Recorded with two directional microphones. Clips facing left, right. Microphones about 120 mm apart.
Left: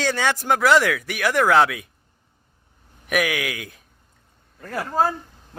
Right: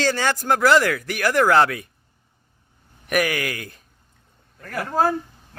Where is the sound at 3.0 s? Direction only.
Centre (ahead or behind).